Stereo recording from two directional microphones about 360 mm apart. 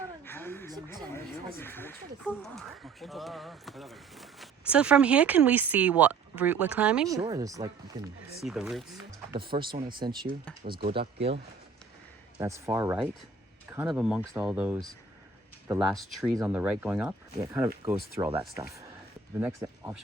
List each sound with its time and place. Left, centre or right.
0.3 s a sound: centre
1.5 s speech: centre
9.3 s speech: centre
12.4 s speech: centre